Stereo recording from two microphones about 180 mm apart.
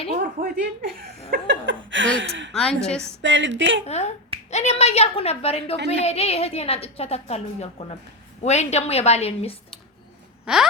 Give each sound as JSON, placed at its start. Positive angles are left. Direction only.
{"t": 0.2, "sound": "speech", "side_deg": -55}
{"t": 1.5, "sound": "chuckle", "side_deg": -90}
{"t": 2.6, "sound": "a woman's voice", "side_deg": 5}
{"t": 3.2, "sound": "speech", "side_deg": -90}
{"t": 3.8, "sound": "a woman's voice", "side_deg": 35}
{"t": 10.4, "sound": "a sound", "side_deg": -5}